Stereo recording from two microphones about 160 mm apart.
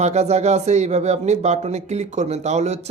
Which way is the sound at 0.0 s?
45° right (ahead or behind).